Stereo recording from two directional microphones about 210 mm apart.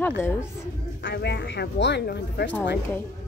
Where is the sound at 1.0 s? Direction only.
55° left (ahead or behind).